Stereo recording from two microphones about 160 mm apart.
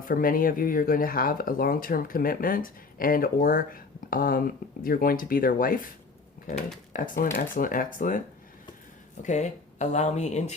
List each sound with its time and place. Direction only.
0.0 s speech: 60° left (ahead or behind)
6.9 s speech: 55° left (ahead or behind)
9.2 s speech: 50° left (ahead or behind)